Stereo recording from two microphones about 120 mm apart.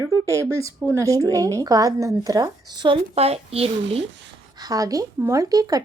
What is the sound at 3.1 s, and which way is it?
Speech, 60° right (ahead or behind).